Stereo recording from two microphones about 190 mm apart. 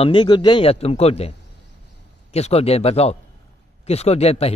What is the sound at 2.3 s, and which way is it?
A man's voice, 35° left (ahead or behind).